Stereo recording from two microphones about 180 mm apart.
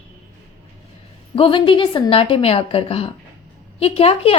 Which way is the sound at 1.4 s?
30° left (ahead or behind).